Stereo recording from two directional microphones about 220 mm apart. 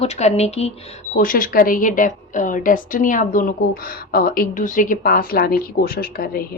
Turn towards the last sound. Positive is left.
turn(degrees=40)  # may be behind; listen again after turning